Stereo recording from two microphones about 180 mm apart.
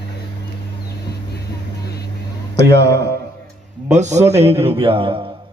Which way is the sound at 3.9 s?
40° right (ahead or behind).